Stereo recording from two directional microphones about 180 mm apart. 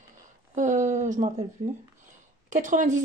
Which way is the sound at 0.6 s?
45° right (ahead or behind).